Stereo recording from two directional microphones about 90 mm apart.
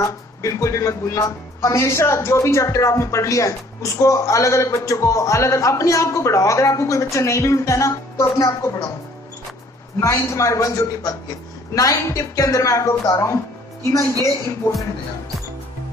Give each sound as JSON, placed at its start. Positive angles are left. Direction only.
{"t": 0.0, "sound": "speech", "side_deg": 35}
{"t": 9.9, "sound": "speech", "side_deg": 35}
{"t": 11.7, "sound": "speech", "side_deg": 35}